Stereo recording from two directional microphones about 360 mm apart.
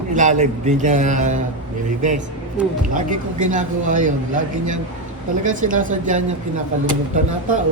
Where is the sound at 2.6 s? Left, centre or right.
Centre.